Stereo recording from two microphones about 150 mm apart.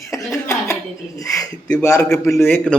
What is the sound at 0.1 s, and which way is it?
A man's voice, 20° left (ahead or behind).